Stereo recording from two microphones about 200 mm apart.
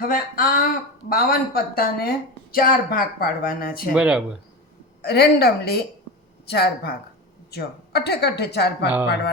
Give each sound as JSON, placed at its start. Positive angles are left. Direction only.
{"t": 0.1, "sound": "a woman's voice", "side_deg": 45}
{"t": 3.9, "sound": "speech", "side_deg": -5}
{"t": 5.0, "sound": "a woman's voice", "side_deg": 55}